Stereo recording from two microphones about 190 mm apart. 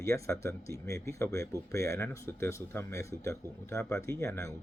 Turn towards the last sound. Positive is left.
turn(degrees=15)  # may be behind; listen again after turning